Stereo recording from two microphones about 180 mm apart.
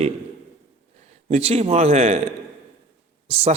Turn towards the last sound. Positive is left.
turn(degrees=-30)  # may be behind; listen again after turning